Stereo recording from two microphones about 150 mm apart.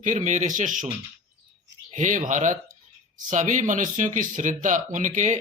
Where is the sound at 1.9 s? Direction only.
55° right (ahead or behind).